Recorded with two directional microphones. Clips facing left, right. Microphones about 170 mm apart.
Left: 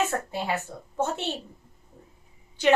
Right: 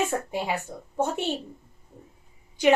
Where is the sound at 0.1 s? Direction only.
15° right (ahead or behind).